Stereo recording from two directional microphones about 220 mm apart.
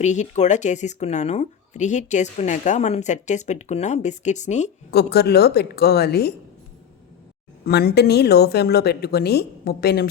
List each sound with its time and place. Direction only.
0.0 s speech: 30° left (ahead or behind)
4.9 s a woman's voice: 45° left (ahead or behind)
7.6 s a woman's voice: 45° left (ahead or behind)